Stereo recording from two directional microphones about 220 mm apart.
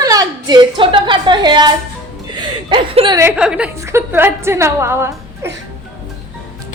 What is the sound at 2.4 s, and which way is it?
Chuckle, 20° right (ahead or behind).